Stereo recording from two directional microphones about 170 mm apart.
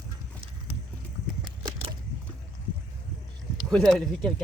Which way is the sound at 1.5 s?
25° right (ahead or behind).